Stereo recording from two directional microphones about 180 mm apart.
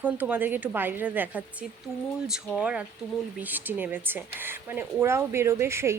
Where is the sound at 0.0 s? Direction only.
10° right (ahead or behind).